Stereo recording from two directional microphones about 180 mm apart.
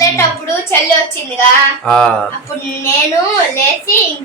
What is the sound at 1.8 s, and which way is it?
Speech, 5° left (ahead or behind).